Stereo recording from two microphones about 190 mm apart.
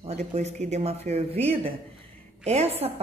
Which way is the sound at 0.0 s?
35° right (ahead or behind).